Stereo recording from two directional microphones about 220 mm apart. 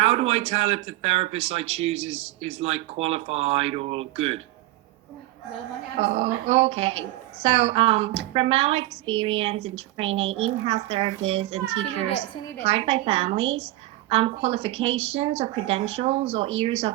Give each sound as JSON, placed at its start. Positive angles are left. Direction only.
{"t": 0.0, "sound": "speech", "side_deg": -25}
{"t": 6.0, "sound": "speech", "side_deg": -25}
{"t": 12.6, "sound": "speech", "side_deg": -25}